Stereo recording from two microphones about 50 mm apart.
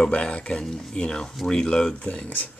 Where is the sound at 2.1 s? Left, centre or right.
Left.